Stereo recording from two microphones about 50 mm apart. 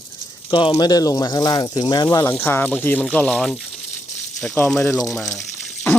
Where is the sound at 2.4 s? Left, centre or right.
Left.